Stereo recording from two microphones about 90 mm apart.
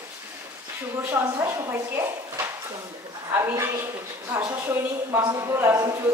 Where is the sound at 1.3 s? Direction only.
30° right (ahead or behind).